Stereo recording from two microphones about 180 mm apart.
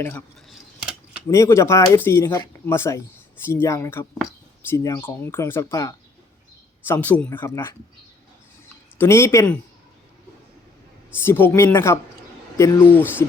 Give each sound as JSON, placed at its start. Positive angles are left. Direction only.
{"t": 0.0, "sound": "speech", "side_deg": 10}
{"t": 9.0, "sound": "speech", "side_deg": 15}
{"t": 11.2, "sound": "speech", "side_deg": 10}